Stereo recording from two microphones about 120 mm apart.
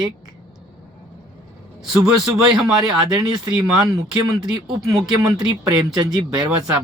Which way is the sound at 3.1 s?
30° right (ahead or behind).